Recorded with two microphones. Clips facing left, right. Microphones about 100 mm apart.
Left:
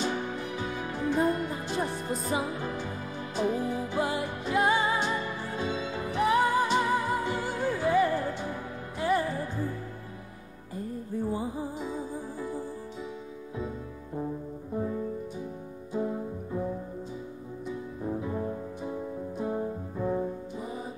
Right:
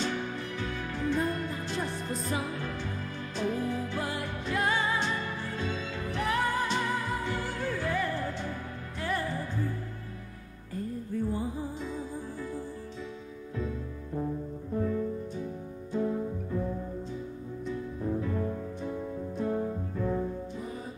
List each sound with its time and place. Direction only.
0.0 s music: 15° left (ahead or behind)
11.2 s music: 15° left (ahead or behind)
14.7 s music: 15° left (ahead or behind)
17.6 s music: 20° left (ahead or behind)